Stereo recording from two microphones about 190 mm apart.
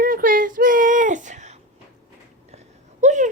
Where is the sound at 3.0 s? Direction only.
40° right (ahead or behind).